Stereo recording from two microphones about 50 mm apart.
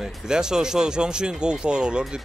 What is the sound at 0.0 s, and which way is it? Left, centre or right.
Speech, centre.